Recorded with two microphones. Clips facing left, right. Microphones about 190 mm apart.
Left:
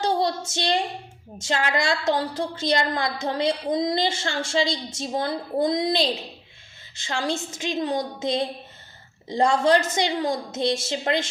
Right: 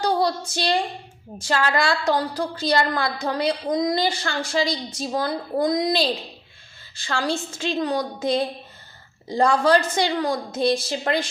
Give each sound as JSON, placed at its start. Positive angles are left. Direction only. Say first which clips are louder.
{"t": 0.0, "sound": "a woman's voice", "louder": "right 2 dB", "side_deg": 25}